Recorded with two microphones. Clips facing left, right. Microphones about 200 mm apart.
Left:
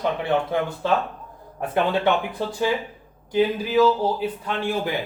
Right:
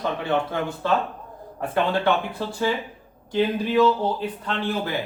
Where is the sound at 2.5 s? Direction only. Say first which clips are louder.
Left 1 dB; 15° left (ahead or behind).